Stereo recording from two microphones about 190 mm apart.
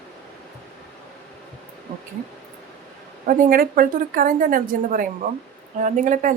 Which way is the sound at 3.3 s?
50° right (ahead or behind).